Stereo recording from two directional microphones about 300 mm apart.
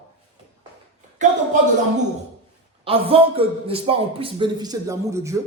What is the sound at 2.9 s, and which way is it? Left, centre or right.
A man's voice, centre.